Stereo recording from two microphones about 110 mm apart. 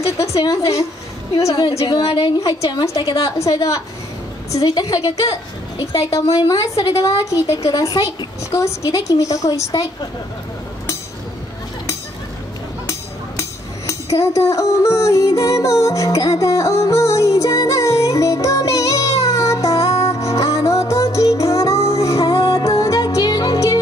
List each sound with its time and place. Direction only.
0.2 s a woman's voice: 30° left (ahead or behind)
13.4 s music: 30° left (ahead or behind)